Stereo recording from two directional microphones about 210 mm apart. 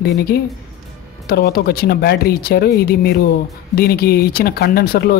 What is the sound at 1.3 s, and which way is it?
A woman's voice, 45° left (ahead or behind).